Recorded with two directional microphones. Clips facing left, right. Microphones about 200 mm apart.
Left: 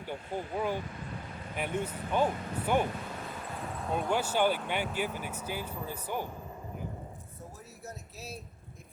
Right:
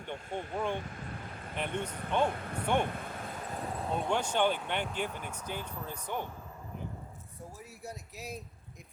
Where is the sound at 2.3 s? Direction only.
55° right (ahead or behind).